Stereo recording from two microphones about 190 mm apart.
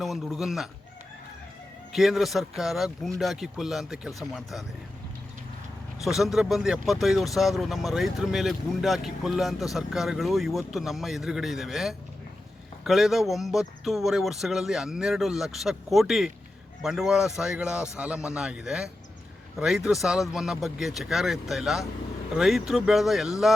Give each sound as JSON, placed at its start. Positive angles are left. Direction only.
{"t": 0.0, "sound": "speech", "side_deg": 0}
{"t": 1.9, "sound": "speech", "side_deg": 0}
{"t": 6.0, "sound": "speech", "side_deg": 0}